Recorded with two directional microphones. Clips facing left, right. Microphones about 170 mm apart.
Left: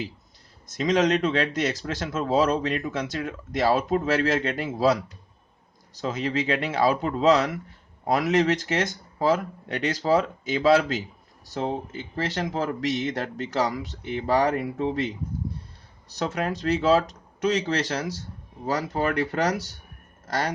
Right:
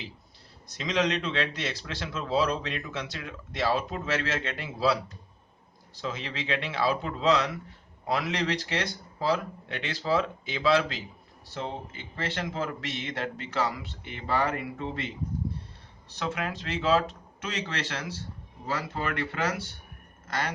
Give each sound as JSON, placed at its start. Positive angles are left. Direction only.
{"t": 0.7, "sound": "a man's voice", "side_deg": 45}